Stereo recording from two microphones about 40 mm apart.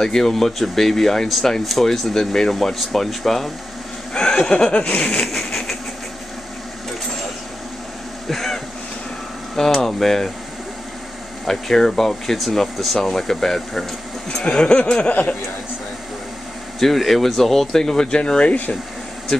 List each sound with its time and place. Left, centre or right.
0.0 s speech: centre
4.1 s speech: left
5.2 s a sound: centre
8.3 s a sound: centre
9.6 s speech: centre
11.4 s speech: centre
14.4 s speech: left
16.8 s speech: centre; by 18.5 s left